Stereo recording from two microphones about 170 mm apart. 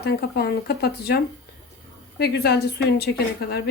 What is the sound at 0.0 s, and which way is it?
Speech, 70° left (ahead or behind).